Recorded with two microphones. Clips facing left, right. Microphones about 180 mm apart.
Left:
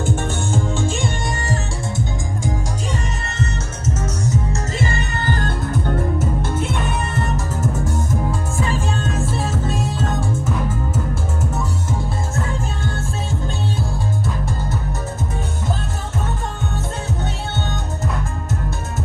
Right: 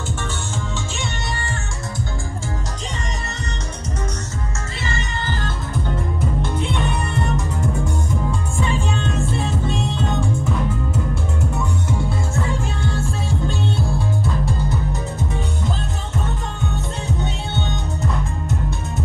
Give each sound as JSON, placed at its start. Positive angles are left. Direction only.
{"t": 0.0, "sound": "music", "side_deg": 55}
{"t": 4.7, "sound": "music", "side_deg": 55}
{"t": 6.1, "sound": "music", "side_deg": 5}